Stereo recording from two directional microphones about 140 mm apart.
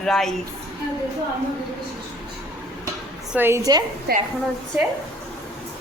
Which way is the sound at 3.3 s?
15° right (ahead or behind).